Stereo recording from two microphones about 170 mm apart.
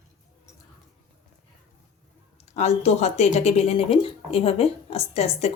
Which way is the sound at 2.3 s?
40° left (ahead or behind).